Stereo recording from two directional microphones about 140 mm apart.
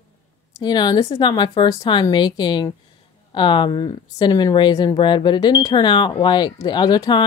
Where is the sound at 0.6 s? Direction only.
30° left (ahead or behind).